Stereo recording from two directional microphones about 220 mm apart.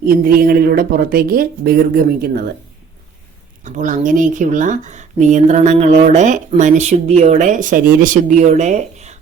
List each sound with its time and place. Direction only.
0.3 s speech: 45° right (ahead or behind)
3.6 s speech: 35° right (ahead or behind)